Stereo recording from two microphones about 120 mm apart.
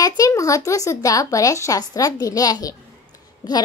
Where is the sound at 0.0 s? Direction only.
30° left (ahead or behind).